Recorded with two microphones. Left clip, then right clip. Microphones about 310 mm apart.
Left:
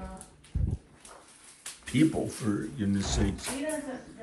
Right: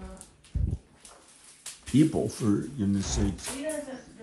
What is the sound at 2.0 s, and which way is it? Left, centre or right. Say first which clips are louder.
Speech: right 2 dB; centre.